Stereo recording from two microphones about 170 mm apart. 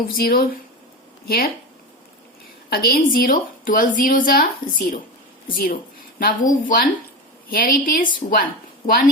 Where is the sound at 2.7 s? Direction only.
60° left (ahead or behind).